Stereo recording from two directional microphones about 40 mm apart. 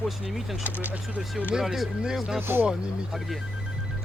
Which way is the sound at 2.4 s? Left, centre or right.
Right.